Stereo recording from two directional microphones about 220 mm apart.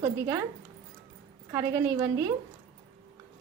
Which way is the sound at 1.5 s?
15° right (ahead or behind).